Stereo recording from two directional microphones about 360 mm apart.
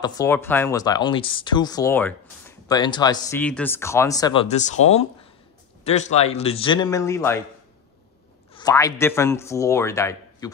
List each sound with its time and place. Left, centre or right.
0.0 s speech: centre
8.5 s speech: centre